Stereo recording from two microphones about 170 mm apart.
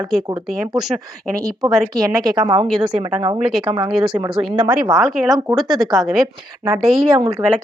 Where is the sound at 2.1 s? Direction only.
25° right (ahead or behind).